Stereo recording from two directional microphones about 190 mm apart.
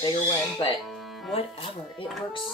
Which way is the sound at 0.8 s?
Centre (ahead or behind).